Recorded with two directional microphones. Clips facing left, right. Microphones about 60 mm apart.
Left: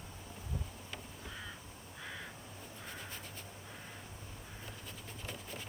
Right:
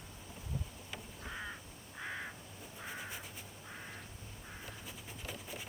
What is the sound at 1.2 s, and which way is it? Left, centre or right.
Crow, right.